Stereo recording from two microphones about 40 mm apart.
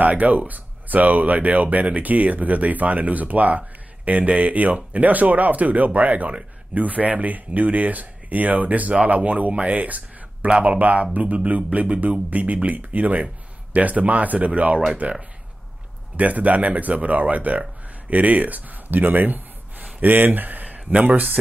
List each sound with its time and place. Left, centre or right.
0.0 s speech: right
16.2 s speech: right